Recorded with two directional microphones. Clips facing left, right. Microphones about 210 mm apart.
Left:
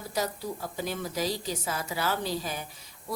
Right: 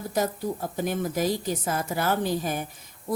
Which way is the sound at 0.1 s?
50° right (ahead or behind).